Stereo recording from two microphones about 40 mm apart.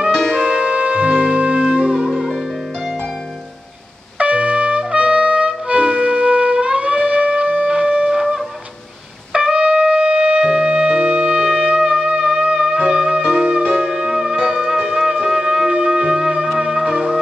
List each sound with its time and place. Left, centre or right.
0.4 s music: centre
0.7 s music: right
2.0 s music: centre
4.2 s music: right; by 17.2 s centre